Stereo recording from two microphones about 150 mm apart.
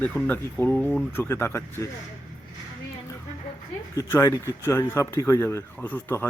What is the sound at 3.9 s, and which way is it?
Speech, 20° left (ahead or behind).